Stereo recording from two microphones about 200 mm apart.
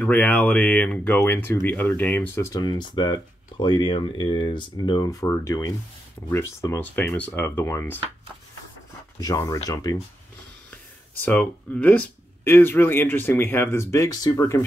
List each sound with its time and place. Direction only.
0.0 s speech: 5° left (ahead or behind)
9.2 s speech: 15° left (ahead or behind)
11.2 s speech: 10° left (ahead or behind)